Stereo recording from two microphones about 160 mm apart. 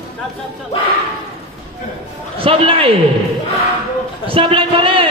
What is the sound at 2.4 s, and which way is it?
Speech, 35° right (ahead or behind).